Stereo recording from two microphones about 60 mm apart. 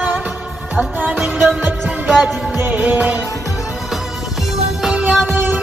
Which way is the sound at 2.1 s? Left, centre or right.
Centre.